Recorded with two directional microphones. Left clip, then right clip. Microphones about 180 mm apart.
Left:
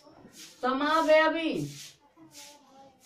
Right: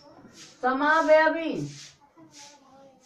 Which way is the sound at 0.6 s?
15° left (ahead or behind).